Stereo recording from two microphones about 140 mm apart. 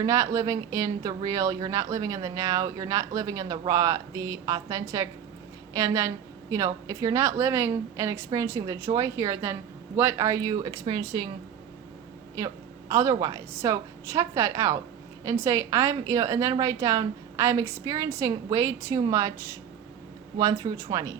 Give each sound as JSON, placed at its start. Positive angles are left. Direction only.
{"t": 0.0, "sound": "speech", "side_deg": -20}
{"t": 10.6, "sound": "speech", "side_deg": -35}
{"t": 12.9, "sound": "speech", "side_deg": -25}